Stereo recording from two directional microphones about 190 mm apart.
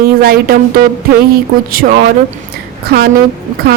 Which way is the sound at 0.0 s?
50° right (ahead or behind).